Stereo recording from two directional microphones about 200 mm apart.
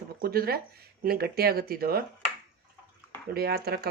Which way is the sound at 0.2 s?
50° right (ahead or behind).